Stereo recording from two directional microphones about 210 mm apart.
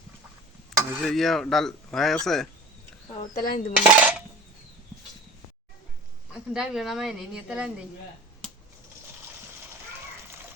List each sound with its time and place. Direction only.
0.9 s speech: 5° right (ahead or behind)
3.3 s cutlery: 40° left (ahead or behind)
3.8 s cutlery: 5° right (ahead or behind)
6.5 s speech: centre (ahead or behind)